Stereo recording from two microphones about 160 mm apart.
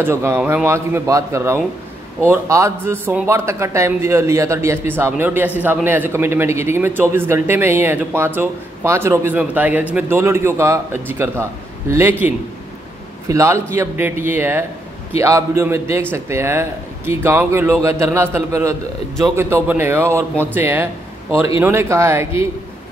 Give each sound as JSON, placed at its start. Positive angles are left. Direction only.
{"t": 0.0, "sound": "a man's voice", "side_deg": -15}